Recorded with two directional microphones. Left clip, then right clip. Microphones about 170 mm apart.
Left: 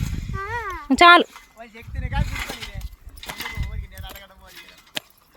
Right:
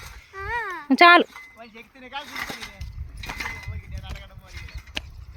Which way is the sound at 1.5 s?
70° left (ahead or behind).